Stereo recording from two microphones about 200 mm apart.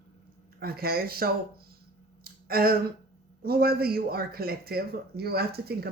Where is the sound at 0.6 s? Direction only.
50° right (ahead or behind).